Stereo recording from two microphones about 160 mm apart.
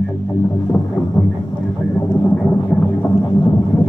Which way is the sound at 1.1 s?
25° left (ahead or behind).